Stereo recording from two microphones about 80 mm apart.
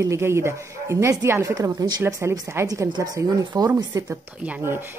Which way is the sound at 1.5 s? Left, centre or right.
Right.